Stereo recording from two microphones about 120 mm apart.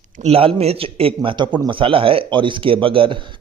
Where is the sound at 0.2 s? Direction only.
55° right (ahead or behind).